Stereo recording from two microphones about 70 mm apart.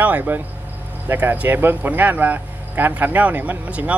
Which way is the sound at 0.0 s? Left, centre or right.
Right.